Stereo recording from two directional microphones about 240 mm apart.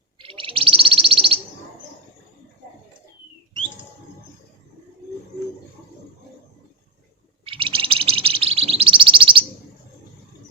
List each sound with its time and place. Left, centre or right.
0.2 s bird: right
7.4 s bird: right